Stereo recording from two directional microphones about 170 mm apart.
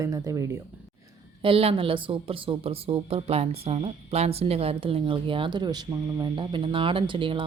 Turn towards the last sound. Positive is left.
turn(degrees=-30)  # may be behind; listen again after turning